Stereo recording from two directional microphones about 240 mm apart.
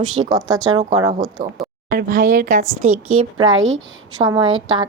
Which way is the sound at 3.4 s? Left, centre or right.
Right.